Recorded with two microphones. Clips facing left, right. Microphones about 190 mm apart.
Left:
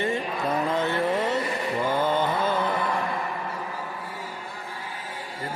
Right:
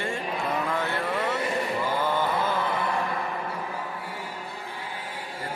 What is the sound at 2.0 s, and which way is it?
Mantra, 20° left (ahead or behind).